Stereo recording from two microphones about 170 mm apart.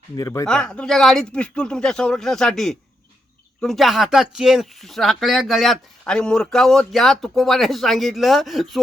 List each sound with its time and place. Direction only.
0.2 s speech: 20° left (ahead or behind)
0.4 s speech: 5° left (ahead or behind)